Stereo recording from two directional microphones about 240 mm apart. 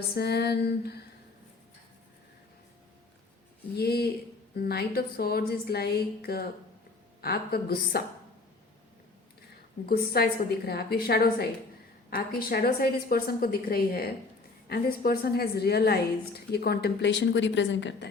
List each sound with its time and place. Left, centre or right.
0.1 s female singing: left
3.8 s a woman's voice: left
9.8 s a woman's voice: left